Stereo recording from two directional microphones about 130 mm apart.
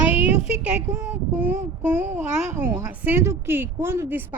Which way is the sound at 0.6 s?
15° right (ahead or behind).